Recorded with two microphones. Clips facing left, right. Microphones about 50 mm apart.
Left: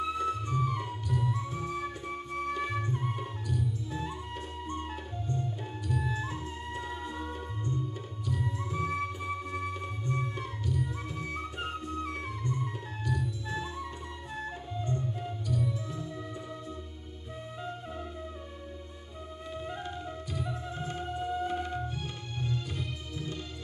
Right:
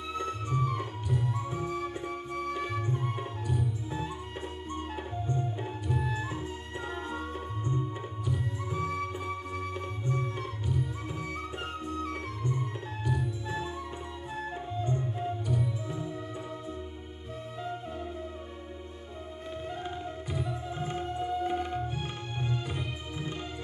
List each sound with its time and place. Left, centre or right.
0.1 s music: centre
1.2 s music: centre
1.7 s music: centre
3.2 s music: centre
6.0 s music: centre
8.7 s music: centre
13.0 s music: centre
14.9 s music: centre
19.8 s music: centre
21.0 s music: centre
21.5 s music: centre